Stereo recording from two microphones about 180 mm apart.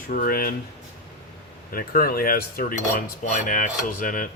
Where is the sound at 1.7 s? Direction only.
50° left (ahead or behind).